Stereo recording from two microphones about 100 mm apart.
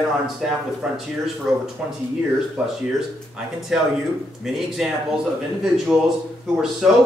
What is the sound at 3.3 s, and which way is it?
A man's voice, 5° right (ahead or behind).